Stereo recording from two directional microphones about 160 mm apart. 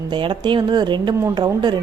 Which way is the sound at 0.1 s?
30° right (ahead or behind).